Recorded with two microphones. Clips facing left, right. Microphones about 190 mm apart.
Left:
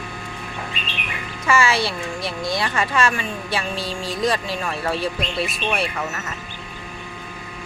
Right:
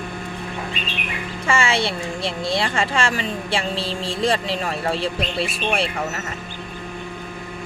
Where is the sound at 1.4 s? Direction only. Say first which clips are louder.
Left 1 dB; 25° right (ahead or behind).